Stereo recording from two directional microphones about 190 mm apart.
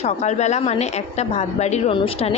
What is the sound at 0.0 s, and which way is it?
A woman's voice, 35° left (ahead or behind).